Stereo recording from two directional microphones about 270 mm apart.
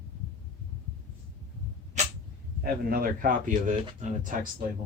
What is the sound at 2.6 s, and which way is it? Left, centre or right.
Speech, right.